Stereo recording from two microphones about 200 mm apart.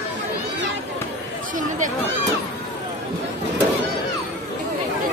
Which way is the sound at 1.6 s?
40° right (ahead or behind).